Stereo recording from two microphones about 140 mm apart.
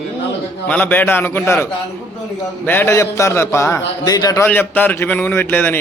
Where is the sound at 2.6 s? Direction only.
15° left (ahead or behind).